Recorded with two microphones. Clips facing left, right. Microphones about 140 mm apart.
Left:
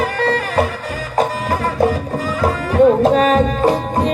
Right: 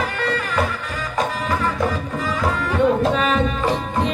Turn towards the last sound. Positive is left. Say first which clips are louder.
# left 5 dB
turn(degrees=40)  # may be behind; listen again after turning